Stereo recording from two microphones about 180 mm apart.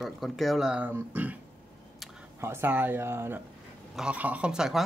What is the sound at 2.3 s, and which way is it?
Speech, 15° right (ahead or behind).